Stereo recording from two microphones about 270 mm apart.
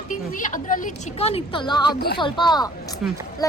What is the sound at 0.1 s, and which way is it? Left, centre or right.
A woman's voice, left.